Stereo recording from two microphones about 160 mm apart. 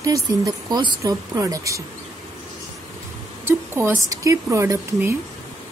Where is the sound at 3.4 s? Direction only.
15° right (ahead or behind).